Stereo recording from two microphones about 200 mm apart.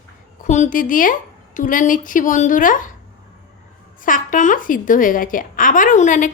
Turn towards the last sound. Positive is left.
turn(degrees=40)  # may be behind; listen again after turning